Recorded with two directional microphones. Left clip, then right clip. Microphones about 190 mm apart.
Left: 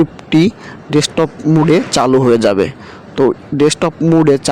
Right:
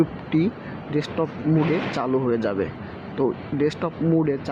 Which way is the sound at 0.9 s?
55° left (ahead or behind).